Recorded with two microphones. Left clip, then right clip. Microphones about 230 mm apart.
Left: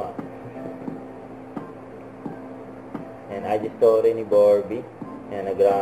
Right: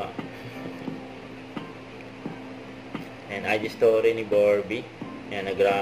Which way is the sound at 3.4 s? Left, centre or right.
Right.